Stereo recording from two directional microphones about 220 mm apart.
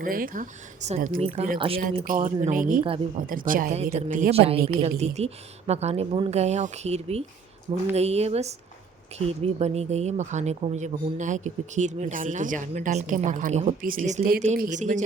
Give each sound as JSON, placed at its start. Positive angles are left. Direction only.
{"t": 0.0, "sound": "speech", "side_deg": -40}
{"t": 2.0, "sound": "speech", "side_deg": -35}